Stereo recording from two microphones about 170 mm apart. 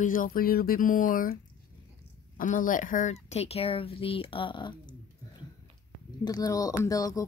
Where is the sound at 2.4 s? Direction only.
50° left (ahead or behind); by 7.3 s 20° left (ahead or behind).